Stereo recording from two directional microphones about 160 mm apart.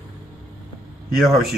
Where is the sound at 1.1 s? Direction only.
Centre (ahead or behind).